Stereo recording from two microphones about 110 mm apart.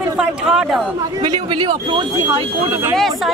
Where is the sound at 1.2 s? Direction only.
45° right (ahead or behind).